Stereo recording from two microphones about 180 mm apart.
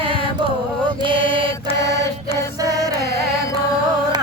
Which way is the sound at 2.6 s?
20° right (ahead or behind).